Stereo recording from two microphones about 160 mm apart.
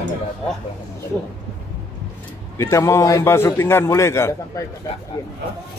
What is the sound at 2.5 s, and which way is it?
A man's voice, 15° left (ahead or behind).